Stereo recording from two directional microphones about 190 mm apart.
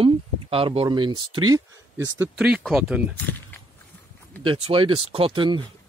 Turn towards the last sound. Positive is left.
turn(degrees=-25)  # may be behind; listen again after turning